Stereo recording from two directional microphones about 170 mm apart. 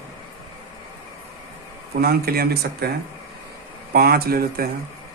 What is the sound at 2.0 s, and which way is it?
Speech, 60° right (ahead or behind).